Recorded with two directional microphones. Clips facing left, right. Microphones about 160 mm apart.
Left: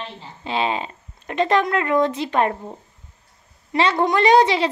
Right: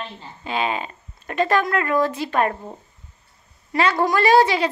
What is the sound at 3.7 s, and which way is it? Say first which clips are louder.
Speech: left 1 dB; 25° left (ahead or behind).